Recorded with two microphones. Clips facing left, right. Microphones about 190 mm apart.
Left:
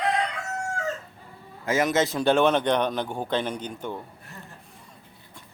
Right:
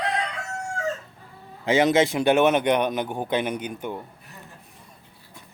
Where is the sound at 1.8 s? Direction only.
25° right (ahead or behind).